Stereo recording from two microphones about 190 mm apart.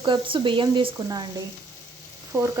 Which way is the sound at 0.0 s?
25° right (ahead or behind).